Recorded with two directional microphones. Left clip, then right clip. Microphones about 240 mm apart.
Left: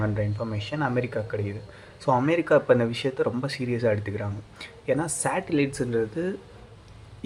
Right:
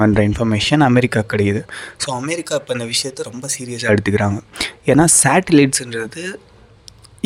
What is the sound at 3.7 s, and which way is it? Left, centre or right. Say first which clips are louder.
Speech: right 11 dB; right.